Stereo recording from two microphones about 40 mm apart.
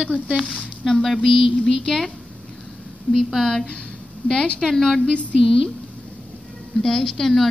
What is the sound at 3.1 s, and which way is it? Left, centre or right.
Speech, left.